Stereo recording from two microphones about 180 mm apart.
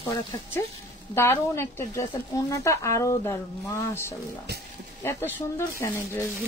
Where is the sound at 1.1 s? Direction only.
15° left (ahead or behind).